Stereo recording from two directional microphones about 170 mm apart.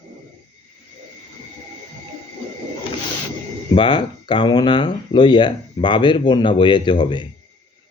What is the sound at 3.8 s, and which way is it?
Speech, 30° left (ahead or behind).